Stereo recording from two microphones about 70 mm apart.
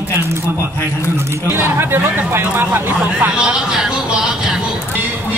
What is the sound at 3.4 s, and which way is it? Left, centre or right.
Speech, centre.